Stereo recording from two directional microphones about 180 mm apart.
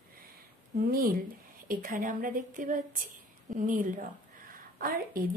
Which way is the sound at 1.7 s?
50° right (ahead or behind).